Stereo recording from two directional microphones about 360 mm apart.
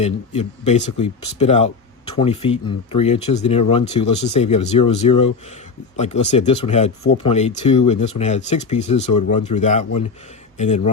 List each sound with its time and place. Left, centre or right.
0.0 s speech: centre